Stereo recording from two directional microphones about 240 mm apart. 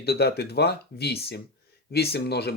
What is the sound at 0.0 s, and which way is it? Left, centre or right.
Speech, left.